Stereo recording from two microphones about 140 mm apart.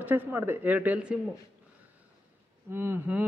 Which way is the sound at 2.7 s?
15° right (ahead or behind).